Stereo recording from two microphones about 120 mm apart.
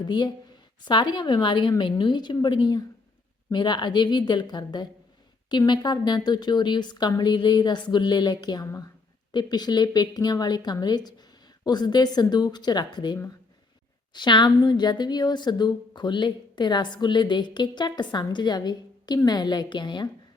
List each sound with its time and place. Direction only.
0.0 s a woman's voice: 40° left (ahead or behind)
8.6 s a woman's voice: 25° left (ahead or behind)
9.3 s a woman's voice: 35° left (ahead or behind)